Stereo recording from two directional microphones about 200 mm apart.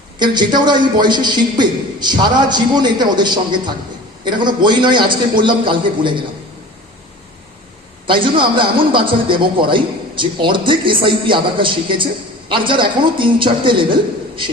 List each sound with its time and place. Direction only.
0.2 s a man's voice: 20° right (ahead or behind)
8.0 s a man's voice: 25° right (ahead or behind)